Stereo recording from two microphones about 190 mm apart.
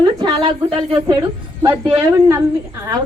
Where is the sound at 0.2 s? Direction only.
25° right (ahead or behind).